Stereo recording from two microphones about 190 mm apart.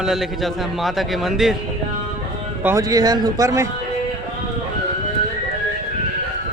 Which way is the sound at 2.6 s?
15° right (ahead or behind).